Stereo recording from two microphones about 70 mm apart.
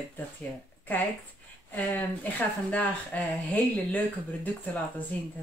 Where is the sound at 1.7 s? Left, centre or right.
Left.